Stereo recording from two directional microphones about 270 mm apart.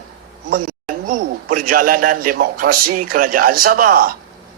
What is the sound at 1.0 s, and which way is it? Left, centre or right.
Speech, right.